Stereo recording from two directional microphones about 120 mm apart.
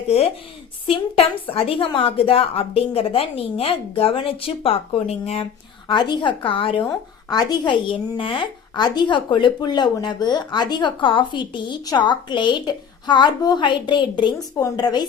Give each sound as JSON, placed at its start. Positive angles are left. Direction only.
{"t": 0.9, "sound": "a woman's voice", "side_deg": 50}
{"t": 5.9, "sound": "a woman's voice", "side_deg": 40}